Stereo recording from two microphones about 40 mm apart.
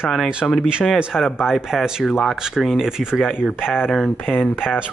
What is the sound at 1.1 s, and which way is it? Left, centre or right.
Speech, centre.